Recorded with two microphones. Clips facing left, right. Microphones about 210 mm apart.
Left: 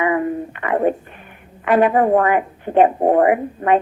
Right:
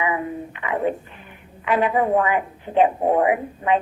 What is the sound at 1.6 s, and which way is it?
A woman's voice, 50° left (ahead or behind).